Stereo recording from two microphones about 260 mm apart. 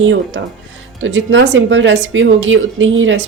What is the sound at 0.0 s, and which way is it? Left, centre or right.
Speech, right.